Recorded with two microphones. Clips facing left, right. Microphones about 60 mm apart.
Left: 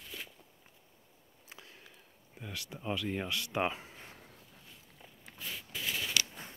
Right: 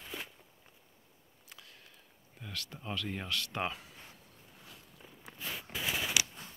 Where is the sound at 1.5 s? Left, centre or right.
Left.